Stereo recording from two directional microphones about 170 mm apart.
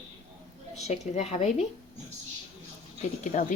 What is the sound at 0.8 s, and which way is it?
Speech, 40° left (ahead or behind).